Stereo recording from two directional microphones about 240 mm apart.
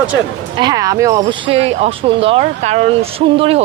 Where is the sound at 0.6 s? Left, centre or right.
Centre.